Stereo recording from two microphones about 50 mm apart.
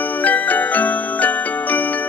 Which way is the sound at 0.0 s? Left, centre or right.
Left.